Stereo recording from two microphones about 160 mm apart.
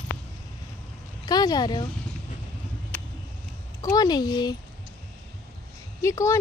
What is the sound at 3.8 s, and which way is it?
Speech, 25° left (ahead or behind).